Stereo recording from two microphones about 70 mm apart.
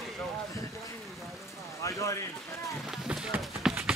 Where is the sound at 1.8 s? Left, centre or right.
Left.